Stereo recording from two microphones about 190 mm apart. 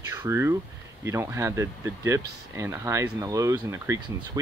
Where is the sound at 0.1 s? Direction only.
15° right (ahead or behind).